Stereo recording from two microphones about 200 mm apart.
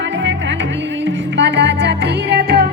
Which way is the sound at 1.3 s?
60° right (ahead or behind).